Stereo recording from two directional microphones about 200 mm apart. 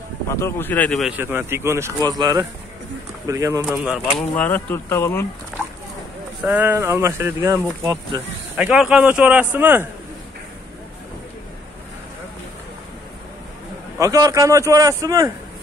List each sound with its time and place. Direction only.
0.3 s speech: 10° left (ahead or behind)
1.2 s speech: 10° right (ahead or behind)
3.7 s speech: 5° right (ahead or behind)
6.4 s speech: 10° right (ahead or behind)
13.9 s speech: 15° right (ahead or behind)